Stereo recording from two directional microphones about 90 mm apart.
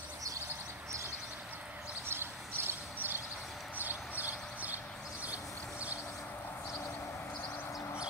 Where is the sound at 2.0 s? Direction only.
25° right (ahead or behind).